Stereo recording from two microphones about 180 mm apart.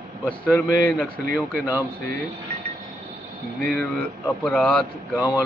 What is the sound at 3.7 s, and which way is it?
Speech, 10° left (ahead or behind).